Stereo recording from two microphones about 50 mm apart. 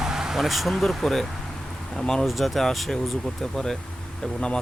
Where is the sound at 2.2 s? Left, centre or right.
Centre.